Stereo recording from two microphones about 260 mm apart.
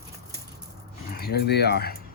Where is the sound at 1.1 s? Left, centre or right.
Left.